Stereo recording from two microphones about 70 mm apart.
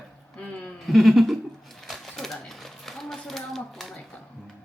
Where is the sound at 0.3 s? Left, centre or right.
Centre.